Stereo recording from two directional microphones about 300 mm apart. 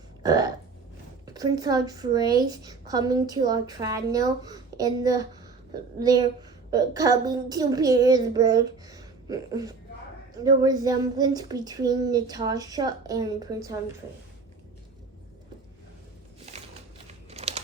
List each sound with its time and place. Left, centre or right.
0.2 s burping: centre
1.2 s a woman's voice: centre
16.5 s a sound: right
17.1 s crumpling: right